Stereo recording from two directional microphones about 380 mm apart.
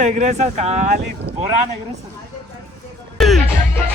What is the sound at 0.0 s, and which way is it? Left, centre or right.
Speech, centre.